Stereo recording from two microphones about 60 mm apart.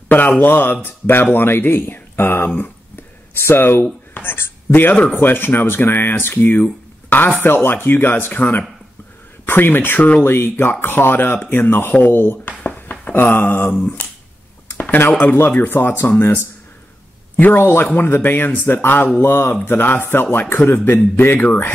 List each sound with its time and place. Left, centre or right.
0.4 s speech: left
10.2 s speech: left
12.6 s a sound: left
13.0 s speech: left